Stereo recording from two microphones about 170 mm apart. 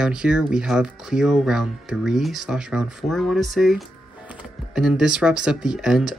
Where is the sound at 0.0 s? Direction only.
5° right (ahead or behind).